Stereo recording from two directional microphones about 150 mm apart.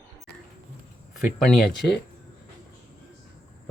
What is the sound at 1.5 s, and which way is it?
Speech, 5° left (ahead or behind).